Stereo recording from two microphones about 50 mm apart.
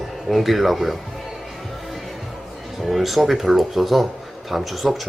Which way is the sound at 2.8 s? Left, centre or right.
Centre.